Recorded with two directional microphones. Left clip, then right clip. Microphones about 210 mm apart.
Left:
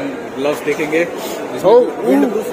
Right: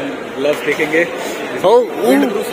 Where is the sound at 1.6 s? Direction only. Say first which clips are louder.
Left 1 dB; 10° right (ahead or behind).